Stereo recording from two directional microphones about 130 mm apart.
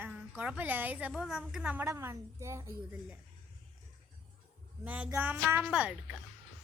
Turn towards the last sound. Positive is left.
turn(degrees=-5)  # may be behind; listen again after turning